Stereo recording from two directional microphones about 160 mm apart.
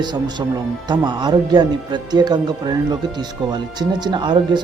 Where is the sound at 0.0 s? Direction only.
25° right (ahead or behind).